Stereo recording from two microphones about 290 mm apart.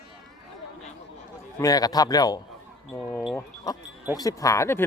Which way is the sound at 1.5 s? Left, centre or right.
Centre.